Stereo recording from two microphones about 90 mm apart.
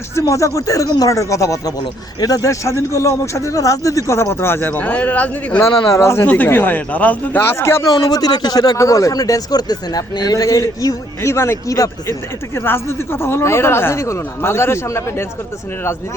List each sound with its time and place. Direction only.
0.2 s speech: 35° left (ahead or behind); by 5.6 s 15° left (ahead or behind)
5.9 s speech: 30° left (ahead or behind)
6.2 s speech: 20° left (ahead or behind)
7.9 s speech: 45° left (ahead or behind)